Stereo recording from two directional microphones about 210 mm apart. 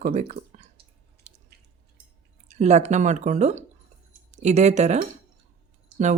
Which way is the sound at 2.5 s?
30° right (ahead or behind).